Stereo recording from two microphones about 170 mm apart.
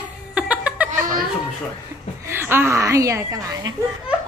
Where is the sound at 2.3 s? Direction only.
15° right (ahead or behind).